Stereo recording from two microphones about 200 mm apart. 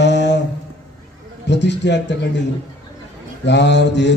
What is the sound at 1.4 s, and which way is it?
Speech, 60° left (ahead or behind).